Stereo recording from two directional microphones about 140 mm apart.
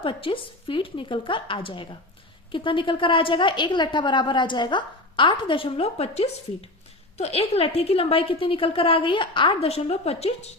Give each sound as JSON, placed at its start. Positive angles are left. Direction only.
{"t": 0.0, "sound": "a woman's voice", "side_deg": 40}